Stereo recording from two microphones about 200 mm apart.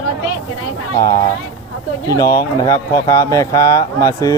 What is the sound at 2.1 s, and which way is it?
Speech, 15° left (ahead or behind).